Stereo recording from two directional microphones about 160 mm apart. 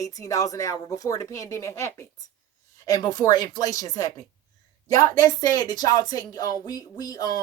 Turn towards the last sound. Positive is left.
turn(degrees=25)  # may be behind; listen again after turning